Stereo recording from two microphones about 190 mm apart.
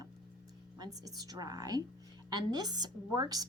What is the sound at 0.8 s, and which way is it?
A woman's voice, 20° right (ahead or behind).